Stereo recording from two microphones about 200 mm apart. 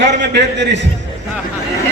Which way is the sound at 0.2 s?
60° right (ahead or behind).